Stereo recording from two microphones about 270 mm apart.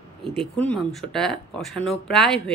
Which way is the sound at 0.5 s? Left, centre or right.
Centre.